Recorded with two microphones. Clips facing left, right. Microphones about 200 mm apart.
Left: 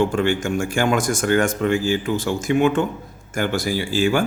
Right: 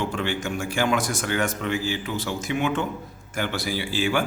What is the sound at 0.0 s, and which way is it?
A man's voice, 50° left (ahead or behind).